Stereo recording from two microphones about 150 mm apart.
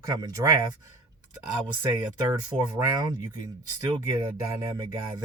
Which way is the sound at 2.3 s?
20° right (ahead or behind).